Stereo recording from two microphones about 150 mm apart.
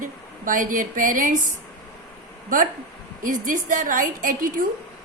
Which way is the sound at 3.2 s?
60° right (ahead or behind).